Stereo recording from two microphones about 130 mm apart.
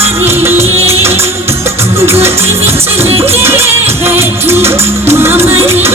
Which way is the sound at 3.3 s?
20° right (ahead or behind).